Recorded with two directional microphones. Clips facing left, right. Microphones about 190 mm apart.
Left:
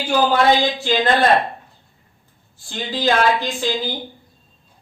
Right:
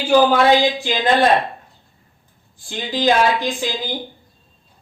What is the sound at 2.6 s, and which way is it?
Speech, 15° right (ahead or behind).